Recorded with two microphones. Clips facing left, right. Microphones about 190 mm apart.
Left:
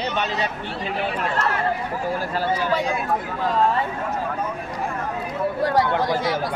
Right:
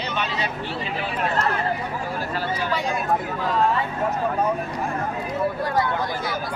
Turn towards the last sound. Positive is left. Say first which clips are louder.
# left 4 dB
turn(degrees=90)